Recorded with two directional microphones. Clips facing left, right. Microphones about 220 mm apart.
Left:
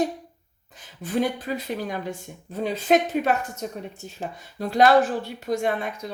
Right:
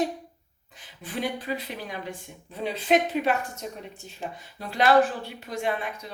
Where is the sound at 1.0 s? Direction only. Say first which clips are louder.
Left 6 dB; 45° left (ahead or behind).